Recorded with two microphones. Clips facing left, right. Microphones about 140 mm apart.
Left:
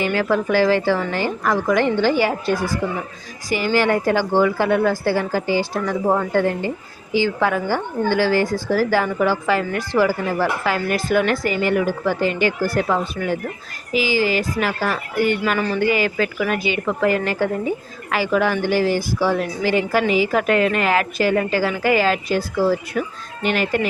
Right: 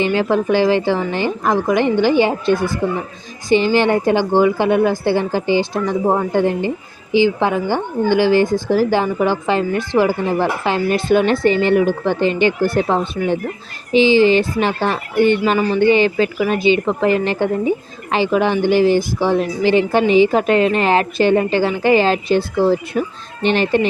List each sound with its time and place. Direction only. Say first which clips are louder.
0.0 s speech: right 3 dB; 20° right (ahead or behind)